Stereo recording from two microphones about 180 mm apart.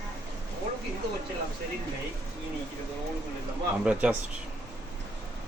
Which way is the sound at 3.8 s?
5° right (ahead or behind).